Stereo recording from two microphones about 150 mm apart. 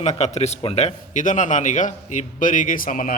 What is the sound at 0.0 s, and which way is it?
A man's voice, 50° left (ahead or behind).